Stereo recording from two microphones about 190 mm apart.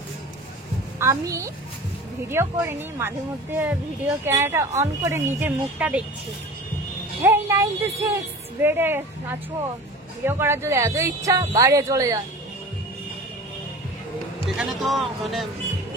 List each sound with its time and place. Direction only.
0.9 s speech: 15° right (ahead or behind)
7.2 s a woman's voice: 10° right (ahead or behind)
14.5 s speech: centre (ahead or behind)